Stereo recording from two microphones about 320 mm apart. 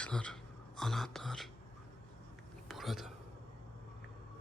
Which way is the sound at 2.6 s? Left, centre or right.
Centre.